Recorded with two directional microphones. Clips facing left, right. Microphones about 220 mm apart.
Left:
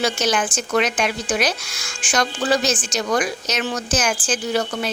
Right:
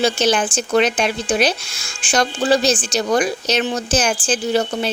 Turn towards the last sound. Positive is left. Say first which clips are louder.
# right 3 dB
turn(degrees=-30)  # may be behind; listen again after turning